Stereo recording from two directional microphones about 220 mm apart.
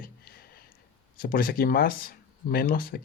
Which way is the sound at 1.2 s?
40° left (ahead or behind).